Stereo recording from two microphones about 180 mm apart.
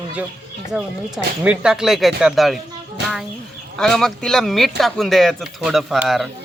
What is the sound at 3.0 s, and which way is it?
Speech, 70° right (ahead or behind).